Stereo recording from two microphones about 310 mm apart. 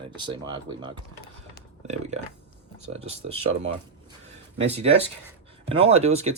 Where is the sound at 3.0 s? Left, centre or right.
Centre.